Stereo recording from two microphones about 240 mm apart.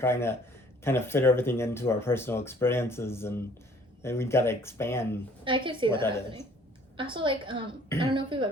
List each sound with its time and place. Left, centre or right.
0.0 s speech: centre
5.5 s a woman's voice: right
5.9 s speech: centre
6.9 s a woman's voice: right